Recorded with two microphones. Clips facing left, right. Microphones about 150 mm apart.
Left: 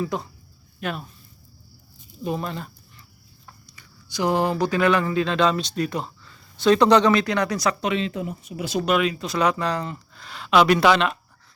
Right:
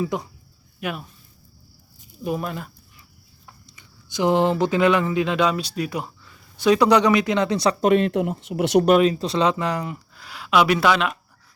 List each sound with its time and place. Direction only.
0.0 s speech: 15° right (ahead or behind)
2.2 s speech: 5° right (ahead or behind)
3.8 s speech: 20° right (ahead or behind)
7.8 s speech: 50° right (ahead or behind)
8.1 s speech: 80° right
8.8 s speech: 40° right (ahead or behind); by 11.2 s centre (ahead or behind)